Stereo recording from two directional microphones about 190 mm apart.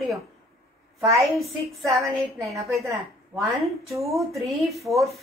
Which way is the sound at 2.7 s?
15° right (ahead or behind).